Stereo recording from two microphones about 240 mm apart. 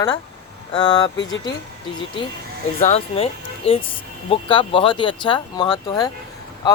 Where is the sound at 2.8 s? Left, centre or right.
Left.